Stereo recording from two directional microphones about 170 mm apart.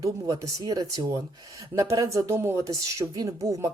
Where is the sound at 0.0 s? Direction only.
20° right (ahead or behind).